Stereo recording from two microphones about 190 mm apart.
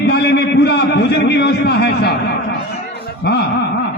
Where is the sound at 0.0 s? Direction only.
60° left (ahead or behind).